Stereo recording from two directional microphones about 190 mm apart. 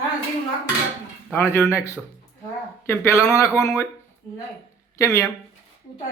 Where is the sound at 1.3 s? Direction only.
10° left (ahead or behind).